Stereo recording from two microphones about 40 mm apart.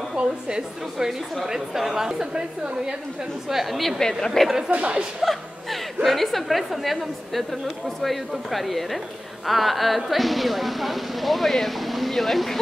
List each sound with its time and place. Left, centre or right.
0.1 s a woman's voice: right
3.4 s a woman's voice: centre
4.0 s a woman's voice: centre
4.6 s speech: right
5.2 s music: centre
6.0 s speech: centre